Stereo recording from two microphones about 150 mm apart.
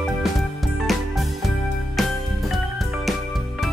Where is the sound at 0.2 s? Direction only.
Centre (ahead or behind).